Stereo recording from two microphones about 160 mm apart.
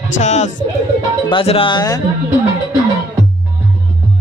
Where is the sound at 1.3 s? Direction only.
35° left (ahead or behind).